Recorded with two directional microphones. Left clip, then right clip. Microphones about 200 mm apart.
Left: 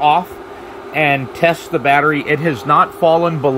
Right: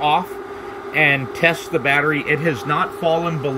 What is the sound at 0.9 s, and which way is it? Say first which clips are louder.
Speech: left 1 dB; 20° left (ahead or behind).